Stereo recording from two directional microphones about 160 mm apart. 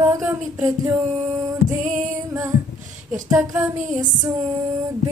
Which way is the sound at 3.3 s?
5° right (ahead or behind).